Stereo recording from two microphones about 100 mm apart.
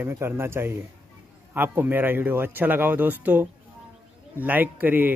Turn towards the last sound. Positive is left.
turn(degrees=-20)  # may be behind; listen again after turning